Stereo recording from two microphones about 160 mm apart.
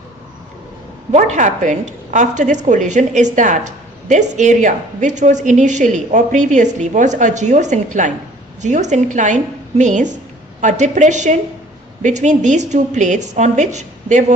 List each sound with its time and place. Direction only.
1.1 s a woman's voice: 50° right (ahead or behind)